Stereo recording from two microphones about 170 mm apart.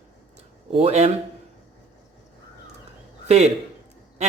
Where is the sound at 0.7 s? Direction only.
35° right (ahead or behind).